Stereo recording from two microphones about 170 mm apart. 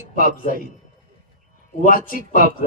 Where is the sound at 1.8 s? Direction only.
55° left (ahead or behind).